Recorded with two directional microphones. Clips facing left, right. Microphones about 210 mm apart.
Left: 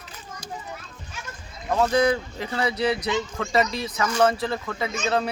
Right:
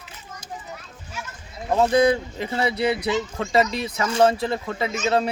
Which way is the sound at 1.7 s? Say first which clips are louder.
Right 3 dB; 25° right (ahead or behind).